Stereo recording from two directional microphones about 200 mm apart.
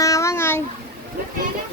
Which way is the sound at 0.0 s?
15° left (ahead or behind).